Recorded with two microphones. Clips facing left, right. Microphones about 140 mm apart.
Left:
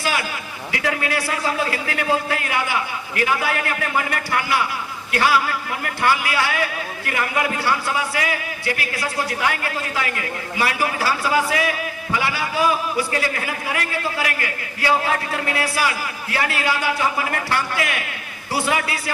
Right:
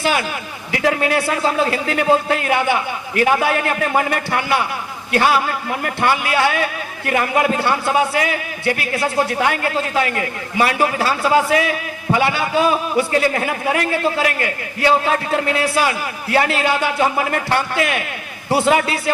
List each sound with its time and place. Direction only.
0.0 s a man's voice: 25° right (ahead or behind)